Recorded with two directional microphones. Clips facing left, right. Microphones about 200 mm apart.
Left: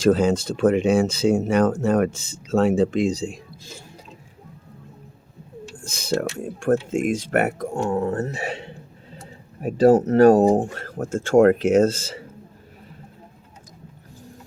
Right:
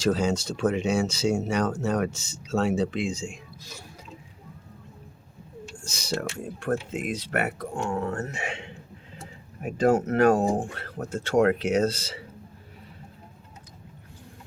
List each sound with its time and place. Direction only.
0.0 s speech: 55° left (ahead or behind); by 3.8 s 30° left (ahead or behind)
5.8 s speech: 55° left (ahead or behind)